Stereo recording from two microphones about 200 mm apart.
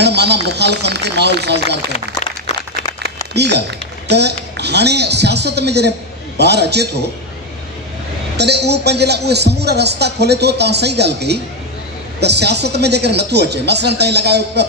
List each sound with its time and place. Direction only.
0.0 s speech: 55° right (ahead or behind)
3.3 s speech: 55° right (ahead or behind)
8.4 s speech: 55° right (ahead or behind)